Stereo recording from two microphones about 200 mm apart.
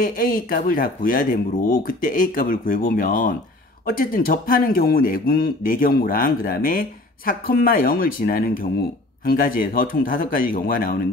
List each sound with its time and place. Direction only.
0.0 s speech: 45° left (ahead or behind)